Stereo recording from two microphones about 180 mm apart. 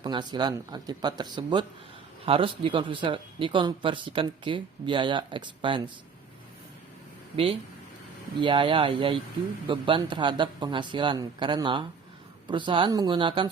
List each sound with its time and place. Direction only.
0.0 s speech: 25° right (ahead or behind)
8.4 s speech: 25° right (ahead or behind)